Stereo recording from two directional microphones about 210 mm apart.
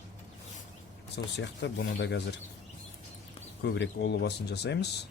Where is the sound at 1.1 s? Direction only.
55° left (ahead or behind).